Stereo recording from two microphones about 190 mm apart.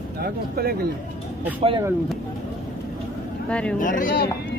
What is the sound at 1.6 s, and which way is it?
Speech, 30° right (ahead or behind).